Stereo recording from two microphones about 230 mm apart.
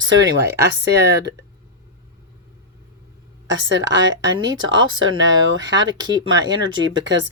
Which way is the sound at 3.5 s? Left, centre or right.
Right.